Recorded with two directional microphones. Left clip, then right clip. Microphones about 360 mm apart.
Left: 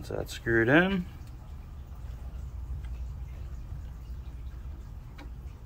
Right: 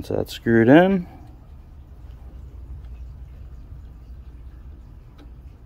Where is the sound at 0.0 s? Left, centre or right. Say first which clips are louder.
Right 9 dB; right.